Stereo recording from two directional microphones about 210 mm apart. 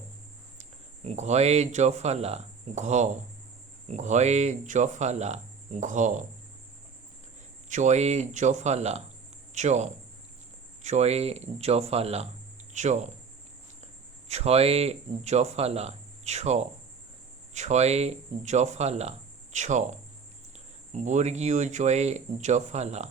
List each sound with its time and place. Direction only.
1.0 s speech: 30° right (ahead or behind)
7.7 s speech: 35° right (ahead or behind)